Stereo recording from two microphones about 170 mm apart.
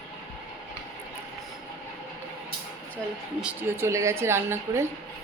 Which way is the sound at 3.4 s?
10° right (ahead or behind).